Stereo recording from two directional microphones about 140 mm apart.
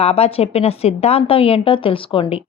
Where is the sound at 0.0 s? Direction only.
45° left (ahead or behind).